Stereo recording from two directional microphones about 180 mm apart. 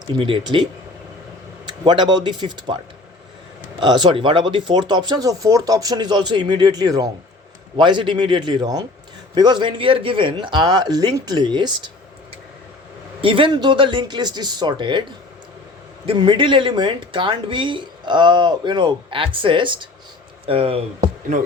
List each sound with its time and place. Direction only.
0.1 s speech: 30° right (ahead or behind)
1.6 s speech: 25° right (ahead or behind)
3.8 s speech: 25° right (ahead or behind)
13.2 s speech: 30° right (ahead or behind)
16.0 s speech: 25° right (ahead or behind)